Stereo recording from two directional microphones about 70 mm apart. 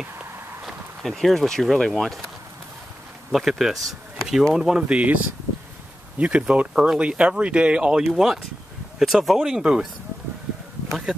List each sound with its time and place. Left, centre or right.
0.7 s speech: centre
3.3 s speech: centre
8.0 s speech: centre